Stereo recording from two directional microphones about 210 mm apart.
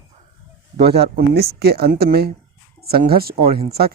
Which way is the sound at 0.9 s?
50° right (ahead or behind).